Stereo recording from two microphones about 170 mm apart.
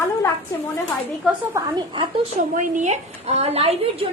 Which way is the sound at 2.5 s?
50° right (ahead or behind).